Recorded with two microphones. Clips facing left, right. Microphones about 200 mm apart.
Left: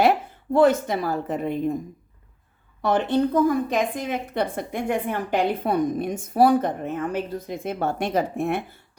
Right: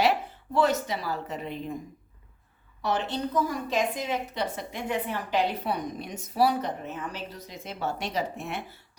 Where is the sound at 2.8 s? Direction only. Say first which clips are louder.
Left 8 dB; 55° left (ahead or behind).